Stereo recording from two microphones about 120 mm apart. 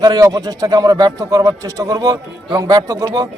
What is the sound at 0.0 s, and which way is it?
A man's voice, 30° right (ahead or behind).